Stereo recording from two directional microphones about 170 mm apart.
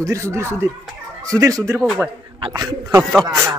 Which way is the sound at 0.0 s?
15° right (ahead or behind).